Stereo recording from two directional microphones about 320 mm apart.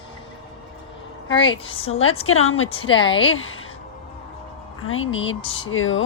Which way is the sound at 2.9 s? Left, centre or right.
Centre.